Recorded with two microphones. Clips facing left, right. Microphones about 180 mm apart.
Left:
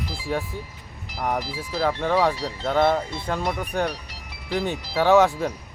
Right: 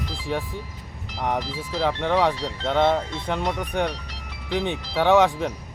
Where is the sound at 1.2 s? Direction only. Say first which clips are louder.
Even; 10° left (ahead or behind).